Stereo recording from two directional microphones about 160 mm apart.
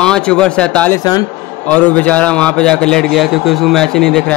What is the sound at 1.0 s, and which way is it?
Speech, 25° left (ahead or behind).